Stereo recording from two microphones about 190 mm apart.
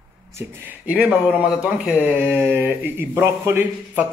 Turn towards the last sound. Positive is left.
turn(degrees=-10)  # may be behind; listen again after turning